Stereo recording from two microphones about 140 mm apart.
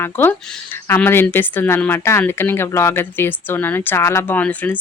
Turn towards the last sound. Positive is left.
turn(degrees=10)  # may be behind; listen again after turning